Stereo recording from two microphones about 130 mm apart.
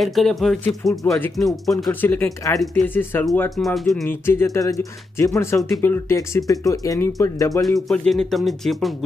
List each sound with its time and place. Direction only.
0.0 s speech: centre (ahead or behind)
1.9 s speech: 15° left (ahead or behind)
3.5 s speech: centre (ahead or behind)
4.1 s speech: 20° left (ahead or behind)
7.9 s speech: centre (ahead or behind)